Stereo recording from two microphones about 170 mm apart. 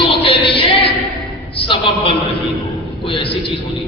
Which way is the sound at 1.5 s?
30° left (ahead or behind).